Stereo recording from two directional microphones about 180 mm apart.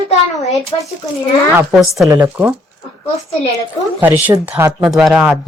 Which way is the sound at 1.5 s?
5° right (ahead or behind).